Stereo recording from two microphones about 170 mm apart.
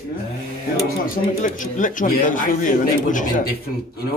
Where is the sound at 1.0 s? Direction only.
50° left (ahead or behind).